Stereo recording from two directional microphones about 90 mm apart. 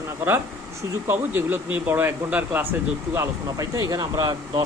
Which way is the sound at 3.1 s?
35° right (ahead or behind).